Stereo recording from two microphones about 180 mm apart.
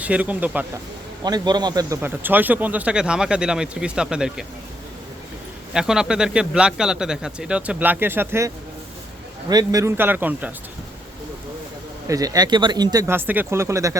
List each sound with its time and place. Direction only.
0.0 s a man's voice: 10° right (ahead or behind)
1.2 s a man's voice: 20° right (ahead or behind); by 4.4 s 5° right (ahead or behind)
5.7 s a man's voice: 5° right (ahead or behind)
12.0 s a man's voice: 20° right (ahead or behind)